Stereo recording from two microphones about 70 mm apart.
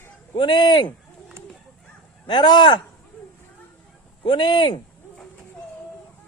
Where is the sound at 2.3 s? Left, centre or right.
Left.